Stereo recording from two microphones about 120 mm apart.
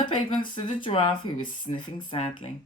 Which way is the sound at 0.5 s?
45° left (ahead or behind).